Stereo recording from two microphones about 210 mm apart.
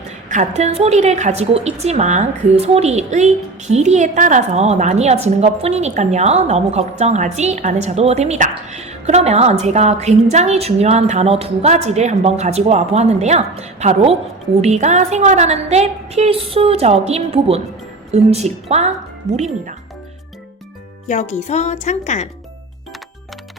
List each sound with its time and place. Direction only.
0.3 s a woman's voice: 35° right (ahead or behind)
21.1 s speech: 35° left (ahead or behind)